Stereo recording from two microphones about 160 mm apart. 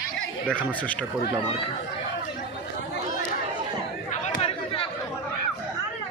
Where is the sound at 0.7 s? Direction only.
10° left (ahead or behind).